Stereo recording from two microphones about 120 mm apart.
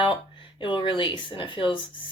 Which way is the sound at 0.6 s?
40° left (ahead or behind).